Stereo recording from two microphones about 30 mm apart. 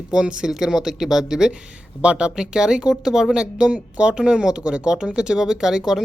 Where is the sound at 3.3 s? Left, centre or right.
Right.